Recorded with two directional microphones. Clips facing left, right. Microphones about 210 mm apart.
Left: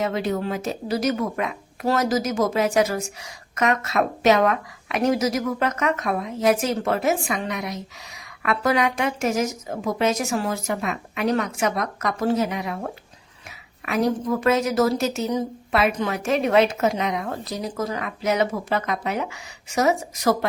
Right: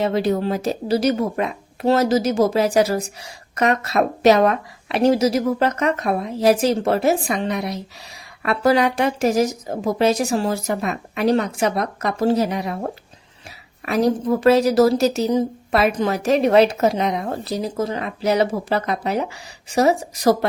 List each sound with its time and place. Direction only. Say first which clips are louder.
0.0 s speech: right 5 dB; 35° right (ahead or behind)